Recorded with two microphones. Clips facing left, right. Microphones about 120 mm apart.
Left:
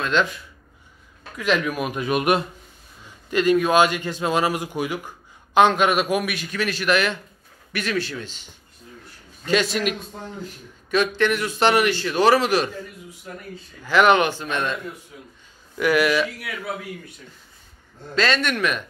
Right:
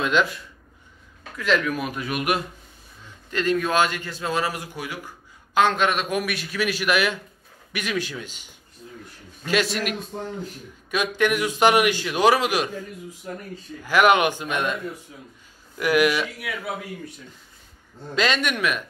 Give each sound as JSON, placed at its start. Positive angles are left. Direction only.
{"t": 0.0, "sound": "a man's voice", "side_deg": -5}
{"t": 1.4, "sound": "speech", "side_deg": 15}
{"t": 3.3, "sound": "a man's voice", "side_deg": 15}
{"t": 9.5, "sound": "a man's voice", "side_deg": 0}
{"t": 13.8, "sound": "a man's voice", "side_deg": -10}
{"t": 15.8, "sound": "a man's voice", "side_deg": -10}
{"t": 18.1, "sound": "a man's voice", "side_deg": -15}